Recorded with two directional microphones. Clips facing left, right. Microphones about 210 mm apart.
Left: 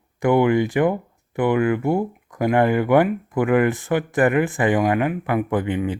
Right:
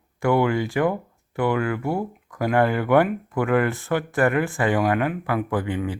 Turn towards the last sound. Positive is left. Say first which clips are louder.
# left 3 dB
turn(degrees=20)  # may be behind; listen again after turning